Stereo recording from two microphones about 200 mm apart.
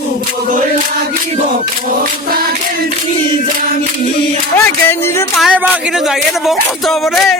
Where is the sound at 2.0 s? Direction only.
45° right (ahead or behind).